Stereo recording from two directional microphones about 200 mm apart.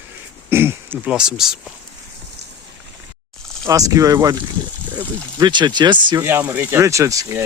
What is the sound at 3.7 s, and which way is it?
Speech, 15° right (ahead or behind).